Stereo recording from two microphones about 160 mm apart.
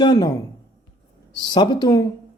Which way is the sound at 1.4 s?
30° left (ahead or behind).